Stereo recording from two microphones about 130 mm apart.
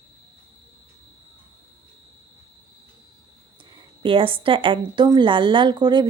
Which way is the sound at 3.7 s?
40° right (ahead or behind).